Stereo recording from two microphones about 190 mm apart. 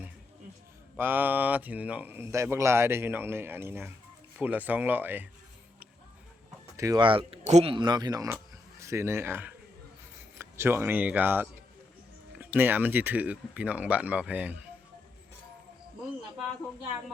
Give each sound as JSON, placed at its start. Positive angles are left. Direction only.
{"t": 0.9, "sound": "speech", "side_deg": -10}
{"t": 6.7, "sound": "speech", "side_deg": -20}
{"t": 10.6, "sound": "speech", "side_deg": -10}